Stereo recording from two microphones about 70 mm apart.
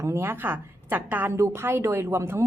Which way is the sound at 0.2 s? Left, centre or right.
Right.